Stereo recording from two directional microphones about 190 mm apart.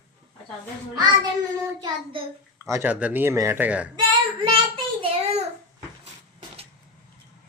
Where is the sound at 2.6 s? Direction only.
10° right (ahead or behind).